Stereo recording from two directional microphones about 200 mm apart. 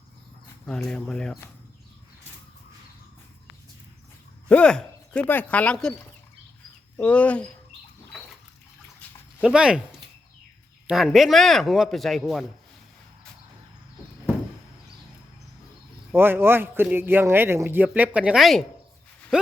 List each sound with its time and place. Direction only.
0.6 s speech: 5° left (ahead or behind)
4.4 s speech: 5° left (ahead or behind)
6.9 s speech: 5° left (ahead or behind)
9.4 s speech: 5° right (ahead or behind)
10.8 s speech: centre (ahead or behind)
16.1 s a man's voice: 10° right (ahead or behind)